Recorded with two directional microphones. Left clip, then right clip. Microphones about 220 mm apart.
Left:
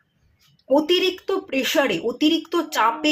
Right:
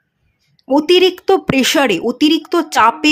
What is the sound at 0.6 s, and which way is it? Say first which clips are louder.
Speech: right 7 dB; 50° right (ahead or behind).